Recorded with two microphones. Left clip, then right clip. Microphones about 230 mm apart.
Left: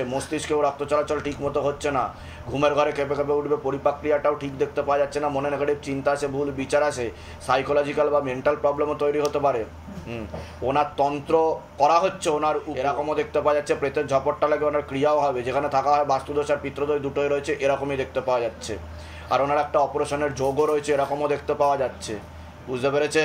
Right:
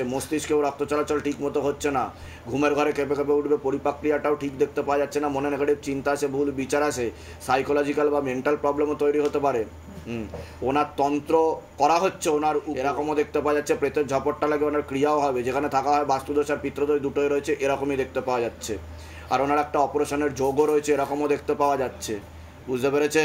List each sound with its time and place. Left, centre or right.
0.0 s a man's voice: right
10.7 s a man's voice: right